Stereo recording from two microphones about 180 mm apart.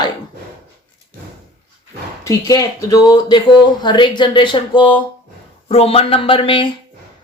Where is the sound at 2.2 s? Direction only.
20° left (ahead or behind).